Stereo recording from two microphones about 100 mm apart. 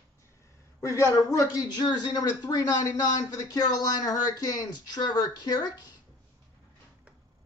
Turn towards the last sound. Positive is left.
turn(degrees=45)  # may be behind; listen again after turning